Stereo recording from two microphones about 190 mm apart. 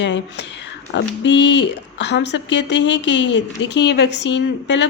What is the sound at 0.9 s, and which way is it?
A woman's voice, 70° left (ahead or behind).